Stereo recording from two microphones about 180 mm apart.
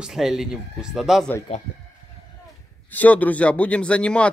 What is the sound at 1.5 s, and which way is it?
Speech, 35° left (ahead or behind).